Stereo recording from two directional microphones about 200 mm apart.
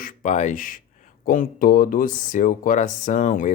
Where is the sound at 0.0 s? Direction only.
40° left (ahead or behind).